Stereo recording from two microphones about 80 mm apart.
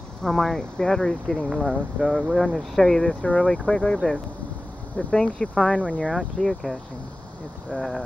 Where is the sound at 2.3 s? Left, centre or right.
Centre.